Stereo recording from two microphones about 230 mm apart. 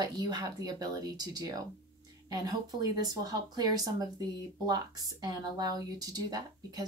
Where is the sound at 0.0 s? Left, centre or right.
Centre.